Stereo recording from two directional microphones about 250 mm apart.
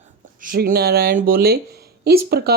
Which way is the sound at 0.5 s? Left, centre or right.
Right.